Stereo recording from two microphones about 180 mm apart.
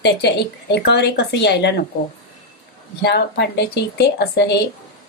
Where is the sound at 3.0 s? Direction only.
65° left (ahead or behind).